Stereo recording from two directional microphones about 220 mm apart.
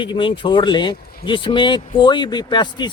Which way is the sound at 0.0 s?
20° left (ahead or behind).